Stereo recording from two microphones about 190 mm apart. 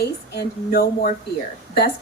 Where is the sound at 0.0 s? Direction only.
55° left (ahead or behind).